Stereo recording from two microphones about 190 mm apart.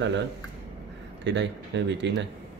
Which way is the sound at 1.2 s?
70° right (ahead or behind).